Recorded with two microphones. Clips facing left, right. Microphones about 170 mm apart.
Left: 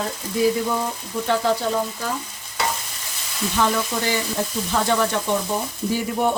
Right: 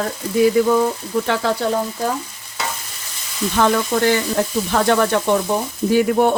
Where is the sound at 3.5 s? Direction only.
60° right (ahead or behind).